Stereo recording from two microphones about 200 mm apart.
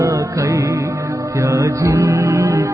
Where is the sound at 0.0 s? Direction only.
15° right (ahead or behind).